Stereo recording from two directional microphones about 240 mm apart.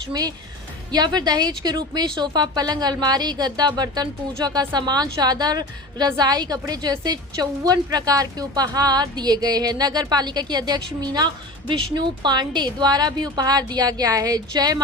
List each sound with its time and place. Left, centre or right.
0.1 s speech: centre